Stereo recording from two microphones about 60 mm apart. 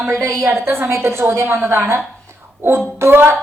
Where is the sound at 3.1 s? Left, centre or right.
Right.